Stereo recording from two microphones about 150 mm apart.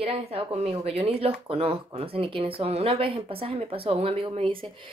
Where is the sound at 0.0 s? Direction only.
40° right (ahead or behind).